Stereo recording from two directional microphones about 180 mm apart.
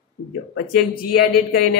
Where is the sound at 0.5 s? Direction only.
55° left (ahead or behind).